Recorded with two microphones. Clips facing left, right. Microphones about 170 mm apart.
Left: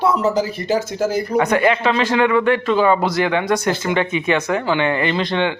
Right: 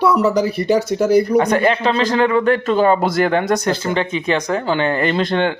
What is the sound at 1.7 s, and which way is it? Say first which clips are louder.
A man's voice: right 1 dB; 35° right (ahead or behind).